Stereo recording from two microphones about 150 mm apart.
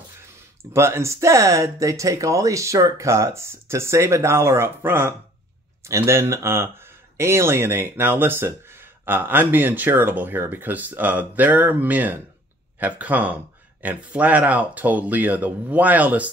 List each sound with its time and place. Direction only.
0.7 s speech: 20° right (ahead or behind)